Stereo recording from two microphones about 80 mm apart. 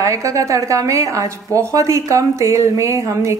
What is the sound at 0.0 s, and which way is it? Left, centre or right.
A woman's voice, right.